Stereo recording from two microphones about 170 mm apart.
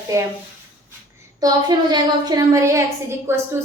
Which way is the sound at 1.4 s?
25° right (ahead or behind).